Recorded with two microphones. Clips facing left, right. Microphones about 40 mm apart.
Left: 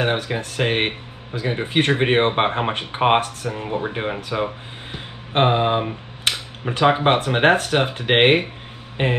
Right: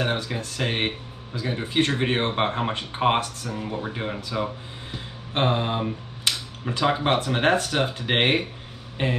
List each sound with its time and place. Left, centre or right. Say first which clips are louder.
0.0 s speech: left 5 dB; left
4.9 s a sound: left 7 dB; left
7.2 s speech: left 5 dB; left